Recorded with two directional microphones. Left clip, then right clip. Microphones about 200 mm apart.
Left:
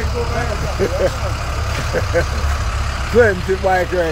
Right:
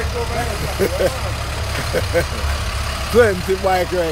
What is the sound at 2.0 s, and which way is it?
Speech, 15° right (ahead or behind).